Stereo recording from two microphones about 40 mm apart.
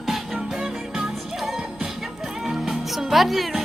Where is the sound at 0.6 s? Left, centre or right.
Centre.